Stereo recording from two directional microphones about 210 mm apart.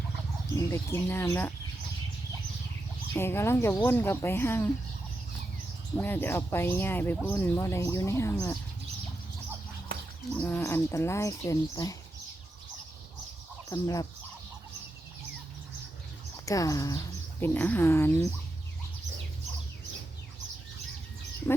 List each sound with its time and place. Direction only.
0.5 s speech: 10° left (ahead or behind)
3.1 s speech: 10° left (ahead or behind)
6.0 s speech: 10° left (ahead or behind)
10.3 s speech: 10° left (ahead or behind)
13.7 s speech: 15° left (ahead or behind)
16.5 s speech: 15° left (ahead or behind)
21.5 s frog: 10° left (ahead or behind)